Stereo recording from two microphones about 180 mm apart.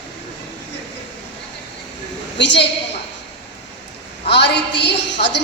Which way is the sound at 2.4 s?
75° left (ahead or behind).